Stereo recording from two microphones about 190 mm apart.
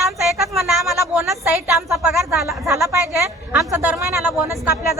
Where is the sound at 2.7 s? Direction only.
15° right (ahead or behind).